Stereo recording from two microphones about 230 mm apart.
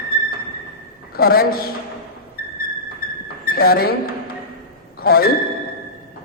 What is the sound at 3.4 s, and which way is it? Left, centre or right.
Speech, left.